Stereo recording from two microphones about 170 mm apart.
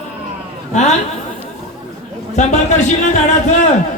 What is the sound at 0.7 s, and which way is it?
Speech, 40° left (ahead or behind).